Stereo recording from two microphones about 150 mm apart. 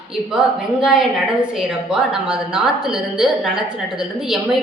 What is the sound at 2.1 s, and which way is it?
Speech, 5° right (ahead or behind).